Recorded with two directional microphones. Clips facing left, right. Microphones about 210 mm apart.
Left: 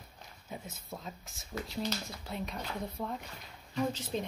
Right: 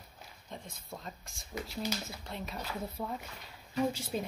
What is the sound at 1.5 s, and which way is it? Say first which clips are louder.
Speech: left 1 dB; 10° right (ahead or behind).